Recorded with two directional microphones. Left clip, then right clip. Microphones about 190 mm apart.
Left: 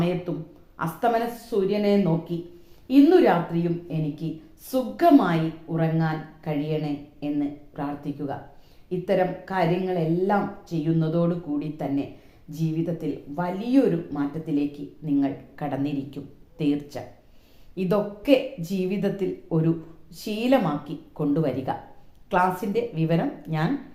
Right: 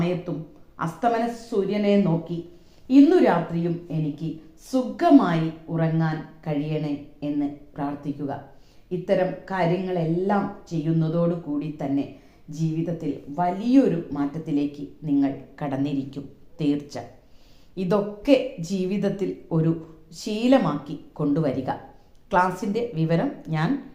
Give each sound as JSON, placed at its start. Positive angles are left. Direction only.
{"t": 0.8, "sound": "speech", "side_deg": -20}